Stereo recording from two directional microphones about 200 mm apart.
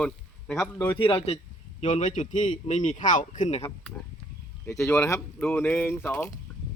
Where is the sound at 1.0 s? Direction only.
25° left (ahead or behind).